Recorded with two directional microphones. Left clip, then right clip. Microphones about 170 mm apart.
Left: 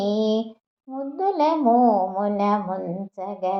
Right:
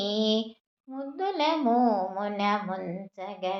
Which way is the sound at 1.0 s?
50° left (ahead or behind).